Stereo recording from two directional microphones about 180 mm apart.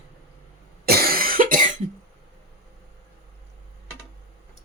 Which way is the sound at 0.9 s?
55° right (ahead or behind).